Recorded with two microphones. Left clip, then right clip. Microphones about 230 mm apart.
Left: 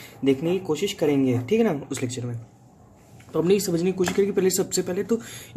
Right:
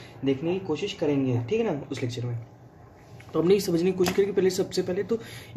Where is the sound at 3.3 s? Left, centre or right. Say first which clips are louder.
Left 1 dB; centre.